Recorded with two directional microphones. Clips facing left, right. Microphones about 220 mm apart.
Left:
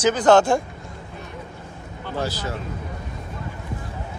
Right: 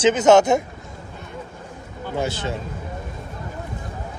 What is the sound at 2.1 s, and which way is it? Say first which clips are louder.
Speech: right 2 dB; 25° right (ahead or behind).